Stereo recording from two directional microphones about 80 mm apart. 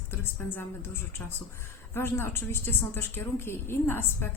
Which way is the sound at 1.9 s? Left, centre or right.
Left.